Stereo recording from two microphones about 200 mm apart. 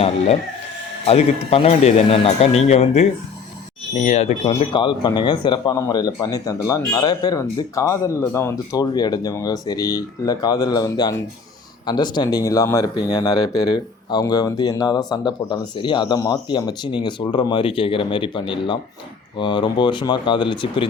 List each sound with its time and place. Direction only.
1.0 s speech: 30° left (ahead or behind)